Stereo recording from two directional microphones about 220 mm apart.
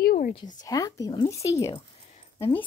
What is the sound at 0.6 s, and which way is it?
A woman's voice, 15° left (ahead or behind).